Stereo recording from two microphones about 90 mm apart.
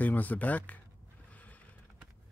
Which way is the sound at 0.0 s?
20° left (ahead or behind).